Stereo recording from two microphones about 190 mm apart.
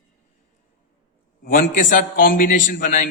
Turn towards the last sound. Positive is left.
turn(degrees=45)  # may be behind; listen again after turning